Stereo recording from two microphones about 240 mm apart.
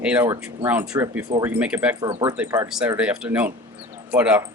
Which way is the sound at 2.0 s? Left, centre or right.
Centre.